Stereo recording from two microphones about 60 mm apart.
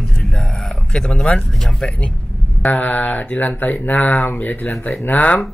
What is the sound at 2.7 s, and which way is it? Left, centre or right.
Speech, left.